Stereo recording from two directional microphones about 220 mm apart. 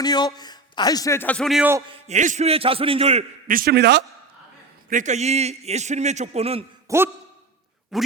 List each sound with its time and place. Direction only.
0.0 s a man's voice: 20° left (ahead or behind); by 1.7 s centre (ahead or behind)
1.9 s a man's voice: 30° right (ahead or behind)
3.4 s a man's voice: 40° right (ahead or behind)
4.9 s a man's voice: 35° right (ahead or behind)
6.8 s a sound: 10° right (ahead or behind)
7.9 s speech: centre (ahead or behind)